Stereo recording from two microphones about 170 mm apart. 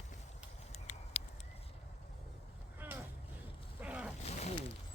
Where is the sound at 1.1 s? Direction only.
35° left (ahead or behind).